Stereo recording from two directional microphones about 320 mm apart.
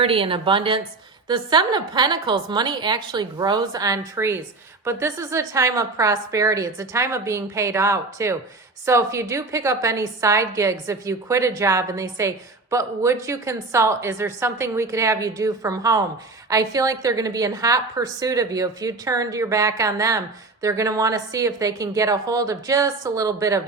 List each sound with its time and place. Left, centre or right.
0.0 s a woman's voice: centre